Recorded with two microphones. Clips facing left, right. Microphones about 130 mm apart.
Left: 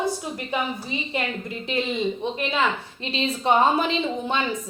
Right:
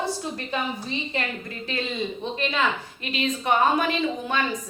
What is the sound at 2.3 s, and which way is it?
Speech, 20° left (ahead or behind).